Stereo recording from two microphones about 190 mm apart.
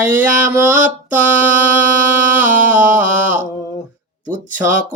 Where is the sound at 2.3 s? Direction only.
10° right (ahead or behind).